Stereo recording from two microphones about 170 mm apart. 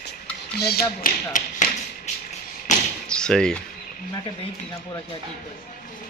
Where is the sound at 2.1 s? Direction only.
40° left (ahead or behind).